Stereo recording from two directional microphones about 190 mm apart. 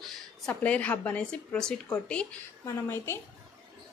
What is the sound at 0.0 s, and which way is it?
A woman's voice, 5° left (ahead or behind).